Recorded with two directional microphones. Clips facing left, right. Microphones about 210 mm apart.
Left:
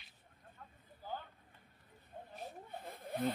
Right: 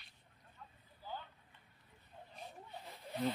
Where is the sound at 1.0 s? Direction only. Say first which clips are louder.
Left 2 dB; 50° left (ahead or behind).